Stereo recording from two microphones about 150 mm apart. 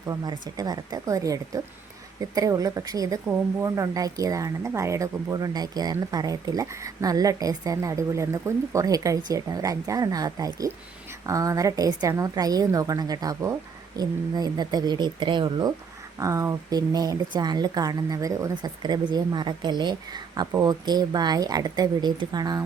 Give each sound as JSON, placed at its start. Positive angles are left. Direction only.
{"t": 0.1, "sound": "speech", "side_deg": -25}
{"t": 16.1, "sound": "speech", "side_deg": -20}